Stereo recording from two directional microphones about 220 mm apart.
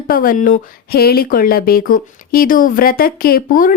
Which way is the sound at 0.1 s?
40° left (ahead or behind).